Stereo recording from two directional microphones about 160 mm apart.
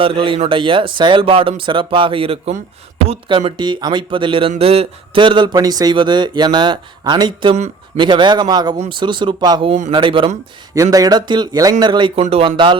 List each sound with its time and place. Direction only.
0.0 s speech: 35° right (ahead or behind)